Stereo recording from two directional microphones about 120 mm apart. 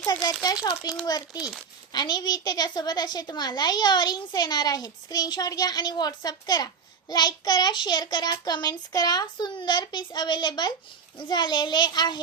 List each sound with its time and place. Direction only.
0.0 s a child's voice: 35° left (ahead or behind)